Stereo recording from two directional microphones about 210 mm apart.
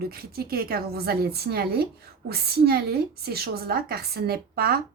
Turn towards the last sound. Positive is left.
turn(degrees=-45)  # may be behind; listen again after turning